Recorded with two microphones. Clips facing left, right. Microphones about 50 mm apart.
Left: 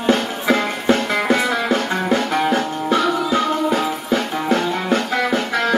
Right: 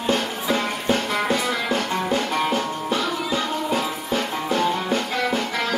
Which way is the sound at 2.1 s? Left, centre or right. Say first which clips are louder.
Left 6 dB; left.